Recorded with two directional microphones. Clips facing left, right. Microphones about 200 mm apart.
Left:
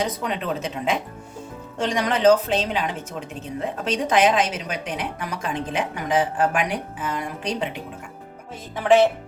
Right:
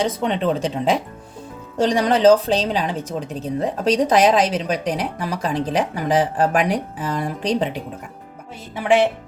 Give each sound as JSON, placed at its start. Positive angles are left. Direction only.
{"t": 0.0, "sound": "a woman's voice", "side_deg": -30}
{"t": 8.7, "sound": "music", "side_deg": -15}